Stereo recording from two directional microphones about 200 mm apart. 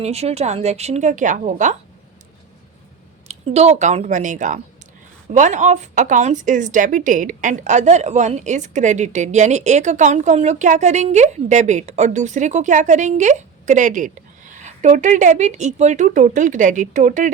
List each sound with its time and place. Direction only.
0.0 s a woman's voice: 30° right (ahead or behind)
3.2 s a woman's voice: 30° right (ahead or behind)